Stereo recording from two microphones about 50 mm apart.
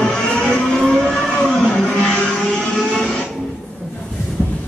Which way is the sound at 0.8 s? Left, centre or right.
Centre.